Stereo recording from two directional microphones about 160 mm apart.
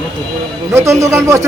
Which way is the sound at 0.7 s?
20° right (ahead or behind).